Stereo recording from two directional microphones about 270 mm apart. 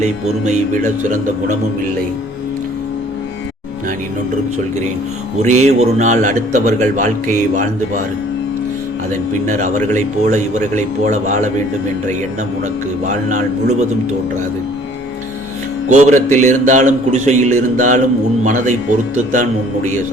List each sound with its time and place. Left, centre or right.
0.0 s speech: right
5.4 s speech: right
9.5 s speech: right
13.1 s speech: right
15.9 s speech: right